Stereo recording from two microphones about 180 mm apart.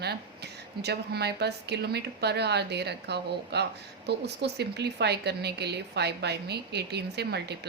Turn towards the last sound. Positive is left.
turn(degrees=-65)  # may be behind; listen again after turning